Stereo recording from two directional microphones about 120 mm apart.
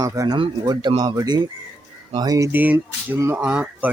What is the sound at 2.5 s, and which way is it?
Speech, 15° right (ahead or behind).